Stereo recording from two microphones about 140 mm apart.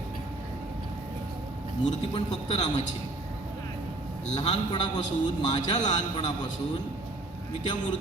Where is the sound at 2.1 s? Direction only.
30° left (ahead or behind).